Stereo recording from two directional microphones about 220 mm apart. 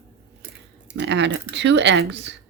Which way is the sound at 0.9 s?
50° right (ahead or behind).